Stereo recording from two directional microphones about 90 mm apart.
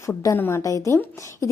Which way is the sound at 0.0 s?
35° left (ahead or behind).